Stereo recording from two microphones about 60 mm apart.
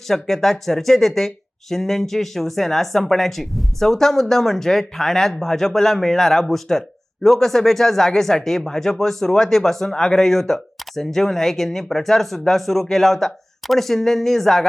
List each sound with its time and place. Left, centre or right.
0.1 s speech: centre